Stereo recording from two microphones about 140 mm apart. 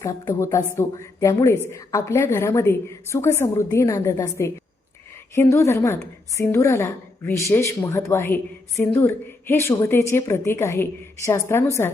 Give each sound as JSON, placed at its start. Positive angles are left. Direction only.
{"t": 0.0, "sound": "a woman's voice", "side_deg": 20}
{"t": 5.3, "sound": "a woman's voice", "side_deg": 20}